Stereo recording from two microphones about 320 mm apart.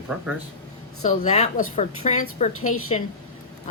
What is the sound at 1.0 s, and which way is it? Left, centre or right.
A woman's voice, left.